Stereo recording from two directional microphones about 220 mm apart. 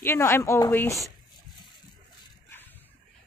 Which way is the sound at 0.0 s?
10° left (ahead or behind).